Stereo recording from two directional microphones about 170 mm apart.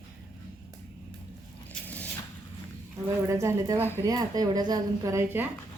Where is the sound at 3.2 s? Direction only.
15° right (ahead or behind).